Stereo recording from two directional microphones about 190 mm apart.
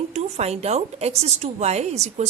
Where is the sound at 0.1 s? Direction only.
35° right (ahead or behind).